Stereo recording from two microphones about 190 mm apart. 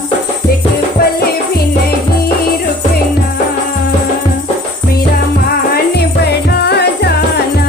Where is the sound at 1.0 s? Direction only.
50° left (ahead or behind).